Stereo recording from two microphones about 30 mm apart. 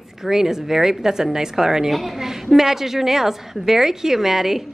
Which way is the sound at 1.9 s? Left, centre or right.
Centre.